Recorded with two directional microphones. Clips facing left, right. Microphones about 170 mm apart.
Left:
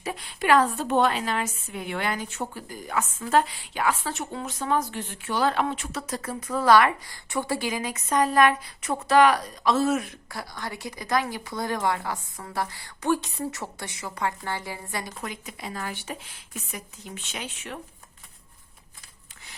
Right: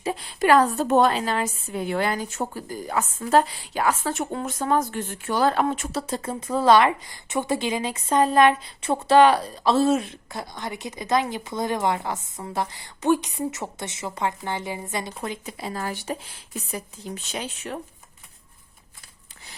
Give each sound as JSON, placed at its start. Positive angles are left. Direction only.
{"t": 0.0, "sound": "a woman's voice", "side_deg": -30}
{"t": 0.3, "sound": "a woman's voice", "side_deg": -40}
{"t": 6.0, "sound": "a woman's voice", "side_deg": -25}